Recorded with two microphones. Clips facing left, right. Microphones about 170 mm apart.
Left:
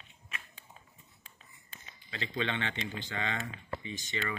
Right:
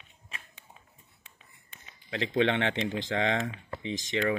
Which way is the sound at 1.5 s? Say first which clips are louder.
Left 1 dB; 70° right (ahead or behind).